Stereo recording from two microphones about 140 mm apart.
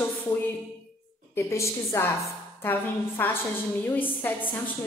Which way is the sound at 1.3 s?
20° left (ahead or behind).